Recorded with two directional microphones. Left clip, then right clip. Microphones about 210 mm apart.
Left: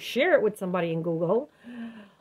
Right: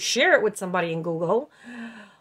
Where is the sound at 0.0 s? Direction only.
25° right (ahead or behind).